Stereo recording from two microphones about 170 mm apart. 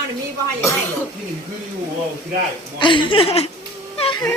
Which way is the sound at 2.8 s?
30° left (ahead or behind).